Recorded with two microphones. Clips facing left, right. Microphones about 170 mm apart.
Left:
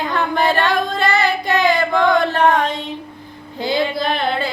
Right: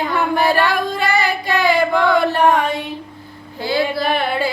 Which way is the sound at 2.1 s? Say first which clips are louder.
Even; 10° right (ahead or behind).